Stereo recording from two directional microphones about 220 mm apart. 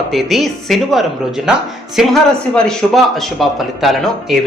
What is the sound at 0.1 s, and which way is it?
A woman's voice, centre (ahead or behind).